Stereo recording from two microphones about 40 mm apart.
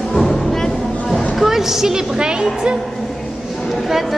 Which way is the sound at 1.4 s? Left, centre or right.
Centre.